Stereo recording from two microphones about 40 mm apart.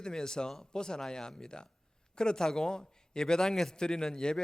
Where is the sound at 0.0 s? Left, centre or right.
Centre.